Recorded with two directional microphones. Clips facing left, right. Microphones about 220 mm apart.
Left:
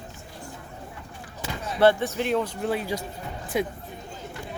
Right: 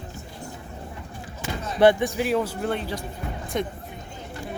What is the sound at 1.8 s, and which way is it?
A woman's voice, 15° right (ahead or behind).